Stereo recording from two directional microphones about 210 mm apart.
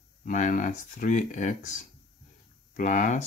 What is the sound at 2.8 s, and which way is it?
Speech, 35° left (ahead or behind).